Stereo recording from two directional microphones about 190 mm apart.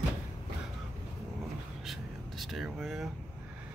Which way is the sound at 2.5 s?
Centre (ahead or behind).